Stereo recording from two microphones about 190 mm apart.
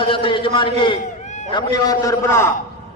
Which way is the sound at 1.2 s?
40° left (ahead or behind).